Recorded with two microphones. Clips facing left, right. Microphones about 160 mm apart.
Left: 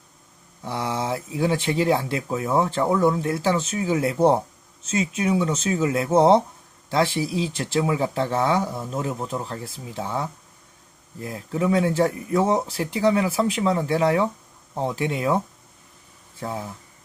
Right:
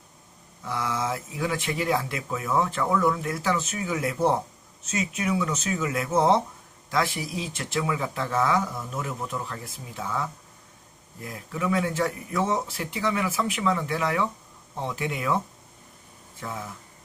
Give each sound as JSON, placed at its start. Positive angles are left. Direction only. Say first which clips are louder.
{"t": 0.6, "sound": "speech", "louder": "left 2 dB", "side_deg": 30}
{"t": 16.4, "sound": "speech", "louder": "left 5 dB", "side_deg": 30}